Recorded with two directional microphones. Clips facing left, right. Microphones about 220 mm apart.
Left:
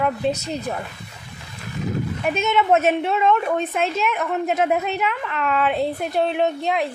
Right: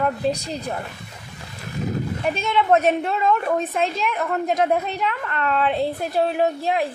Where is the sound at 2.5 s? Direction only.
5° left (ahead or behind).